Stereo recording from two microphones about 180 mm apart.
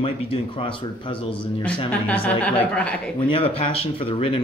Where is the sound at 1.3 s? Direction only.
5° left (ahead or behind).